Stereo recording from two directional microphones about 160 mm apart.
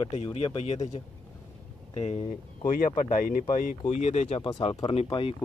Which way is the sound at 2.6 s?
60° left (ahead or behind).